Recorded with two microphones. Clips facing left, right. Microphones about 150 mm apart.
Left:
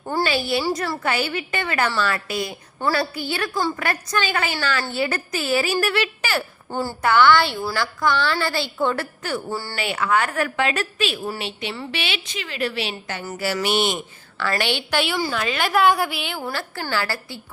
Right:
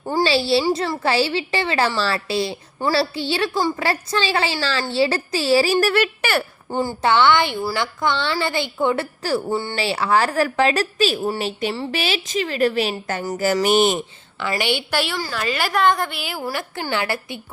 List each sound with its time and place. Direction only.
0.0 s a child's voice: 15° right (ahead or behind)
0.3 s a woman's voice: 30° right (ahead or behind)
3.8 s a woman's voice: 30° right (ahead or behind)
6.7 s a woman's voice: 15° right (ahead or behind); by 14.0 s 40° right (ahead or behind)
14.5 s a woman's voice: 10° right (ahead or behind)
16.5 s a woman's voice: 15° right (ahead or behind)